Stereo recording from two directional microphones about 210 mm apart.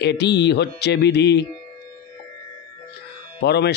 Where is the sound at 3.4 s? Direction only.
50° left (ahead or behind).